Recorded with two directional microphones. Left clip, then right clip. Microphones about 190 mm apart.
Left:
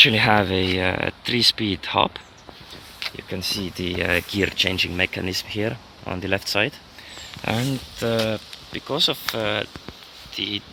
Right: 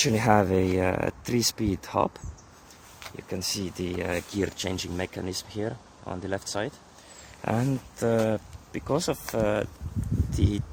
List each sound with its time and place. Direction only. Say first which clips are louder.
0.0 s speech: left 7 dB; 20° right (ahead or behind)
3.0 s speech: left 6 dB; 5° right (ahead or behind)
7.4 s speech: left 3 dB; 5° right (ahead or behind)
7.9 s speech: left 2 dB; 20° right (ahead or behind)